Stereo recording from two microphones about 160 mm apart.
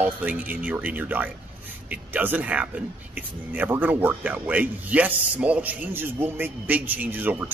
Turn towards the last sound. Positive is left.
turn(degrees=-10)  # may be behind; listen again after turning